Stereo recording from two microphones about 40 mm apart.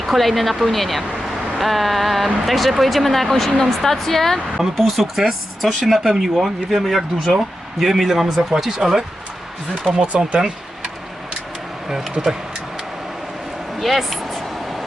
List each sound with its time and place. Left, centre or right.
0.0 s speech: centre
4.5 s speech: centre
9.9 s speech: centre
12.2 s speech: right
13.7 s a sound: centre